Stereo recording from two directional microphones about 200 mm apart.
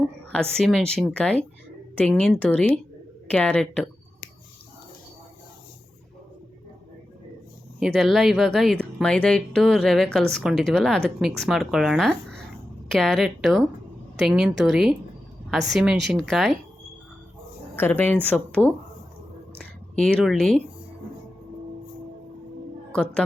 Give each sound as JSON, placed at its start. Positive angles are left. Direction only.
{"t": 0.3, "sound": "speech", "side_deg": 5}
{"t": 7.9, "sound": "speech", "side_deg": 0}
{"t": 17.7, "sound": "a woman's voice", "side_deg": 10}
{"t": 20.0, "sound": "speech", "side_deg": 0}
{"t": 22.9, "sound": "a woman's voice", "side_deg": 5}